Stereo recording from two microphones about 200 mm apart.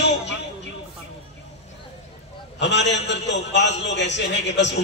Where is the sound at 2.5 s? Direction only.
60° left (ahead or behind).